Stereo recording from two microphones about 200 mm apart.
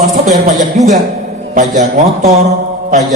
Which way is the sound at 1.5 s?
40° right (ahead or behind).